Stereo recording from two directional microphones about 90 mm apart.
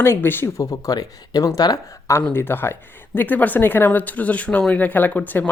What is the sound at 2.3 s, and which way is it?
Speech, 25° left (ahead or behind).